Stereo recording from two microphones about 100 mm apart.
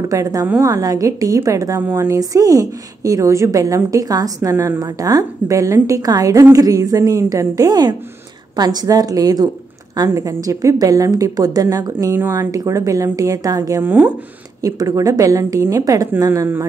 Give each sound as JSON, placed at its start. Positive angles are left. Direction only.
{"t": 0.1, "sound": "a woman's voice", "side_deg": -35}
{"t": 13.8, "sound": "speech", "side_deg": -20}
{"t": 14.6, "sound": "a woman's voice", "side_deg": -35}
{"t": 16.3, "sound": "speech", "side_deg": -25}